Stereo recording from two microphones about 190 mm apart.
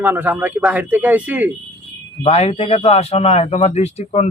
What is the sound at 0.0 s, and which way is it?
Speech, 10° right (ahead or behind).